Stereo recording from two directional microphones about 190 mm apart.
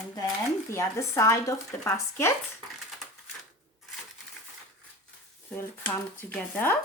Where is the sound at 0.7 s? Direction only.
15° left (ahead or behind).